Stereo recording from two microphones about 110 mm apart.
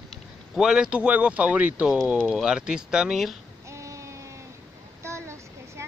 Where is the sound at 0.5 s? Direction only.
5° right (ahead or behind).